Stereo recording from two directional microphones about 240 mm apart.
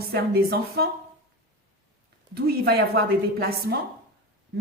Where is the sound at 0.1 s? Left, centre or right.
Right.